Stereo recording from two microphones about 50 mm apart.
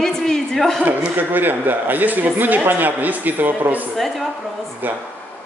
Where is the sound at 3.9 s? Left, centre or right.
Centre.